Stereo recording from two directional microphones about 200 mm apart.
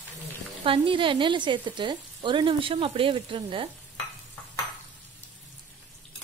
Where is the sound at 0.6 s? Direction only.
25° right (ahead or behind).